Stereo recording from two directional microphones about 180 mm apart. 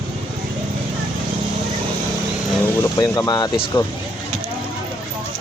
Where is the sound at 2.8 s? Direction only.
15° left (ahead or behind).